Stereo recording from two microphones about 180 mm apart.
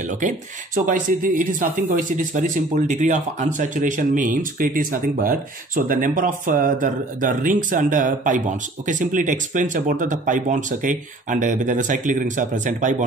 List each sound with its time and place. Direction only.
0.0 s speech: 45° right (ahead or behind)